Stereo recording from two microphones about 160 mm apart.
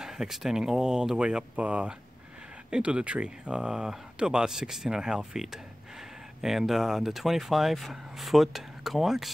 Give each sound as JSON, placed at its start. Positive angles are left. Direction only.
{"t": 0.0, "sound": "speech", "side_deg": -5}